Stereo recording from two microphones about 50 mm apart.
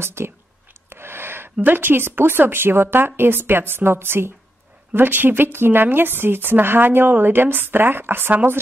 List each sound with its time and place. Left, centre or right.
0.0 s a woman's voice: right